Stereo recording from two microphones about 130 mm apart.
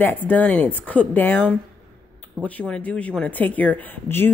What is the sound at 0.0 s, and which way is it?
Speech, 15° left (ahead or behind).